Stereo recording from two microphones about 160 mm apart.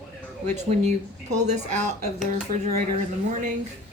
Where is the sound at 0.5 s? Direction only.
45° right (ahead or behind).